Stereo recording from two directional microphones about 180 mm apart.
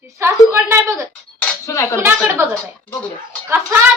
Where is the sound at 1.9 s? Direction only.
10° right (ahead or behind).